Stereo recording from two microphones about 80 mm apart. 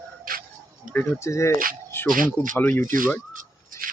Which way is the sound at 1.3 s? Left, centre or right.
Left.